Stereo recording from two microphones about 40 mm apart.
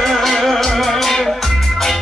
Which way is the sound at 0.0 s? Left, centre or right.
Centre.